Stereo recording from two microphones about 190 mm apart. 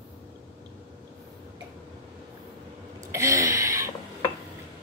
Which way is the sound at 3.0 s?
15° right (ahead or behind).